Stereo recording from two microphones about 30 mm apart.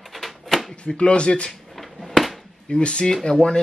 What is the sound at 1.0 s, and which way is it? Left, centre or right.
Speech, left.